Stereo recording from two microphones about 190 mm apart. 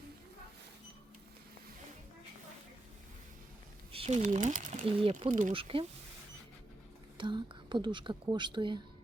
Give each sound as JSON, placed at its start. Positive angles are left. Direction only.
{"t": 3.9, "sound": "speech", "side_deg": -35}
{"t": 4.9, "sound": "speech", "side_deg": -30}
{"t": 7.2, "sound": "speech", "side_deg": -25}